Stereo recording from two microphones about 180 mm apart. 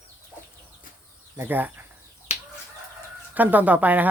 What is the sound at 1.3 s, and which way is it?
Speech, 10° right (ahead or behind).